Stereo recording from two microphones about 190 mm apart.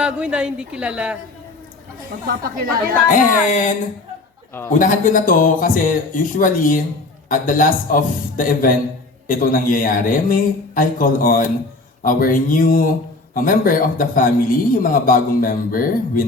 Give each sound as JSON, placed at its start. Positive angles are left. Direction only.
{"t": 0.0, "sound": "a woman's voice", "side_deg": -5}
{"t": 2.2, "sound": "a woman's voice", "side_deg": -55}
{"t": 3.1, "sound": "speech", "side_deg": 40}
{"t": 4.8, "sound": "a man's voice", "side_deg": 45}